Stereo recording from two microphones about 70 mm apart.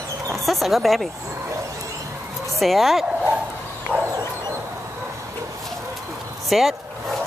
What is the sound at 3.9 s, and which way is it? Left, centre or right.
Bow-wow, right.